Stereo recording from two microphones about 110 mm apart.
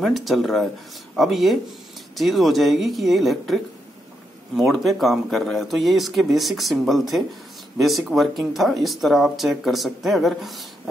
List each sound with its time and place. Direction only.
0.0 s speech: centre (ahead or behind)